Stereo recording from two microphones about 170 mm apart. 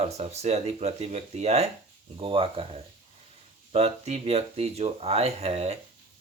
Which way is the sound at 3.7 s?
40° right (ahead or behind).